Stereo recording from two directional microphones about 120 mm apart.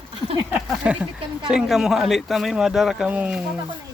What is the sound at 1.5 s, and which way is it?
Speech, 5° right (ahead or behind).